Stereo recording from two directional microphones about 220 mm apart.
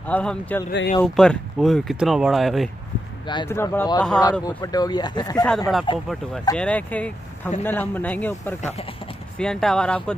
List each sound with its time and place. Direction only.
0.0 s speech: 5° left (ahead or behind)
0.7 s speech: 45° left (ahead or behind)
1.0 s speech: centre (ahead or behind)
3.3 s speech: 15° left (ahead or behind)
6.5 s speech: 5° left (ahead or behind)
8.7 s speech: 25° left (ahead or behind)
9.4 s speech: centre (ahead or behind)